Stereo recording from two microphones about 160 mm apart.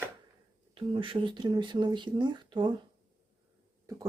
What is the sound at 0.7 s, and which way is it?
Speech, 30° right (ahead or behind).